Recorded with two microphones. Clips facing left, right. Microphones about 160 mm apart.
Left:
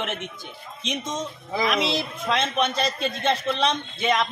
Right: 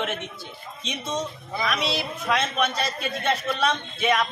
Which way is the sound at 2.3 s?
25° left (ahead or behind).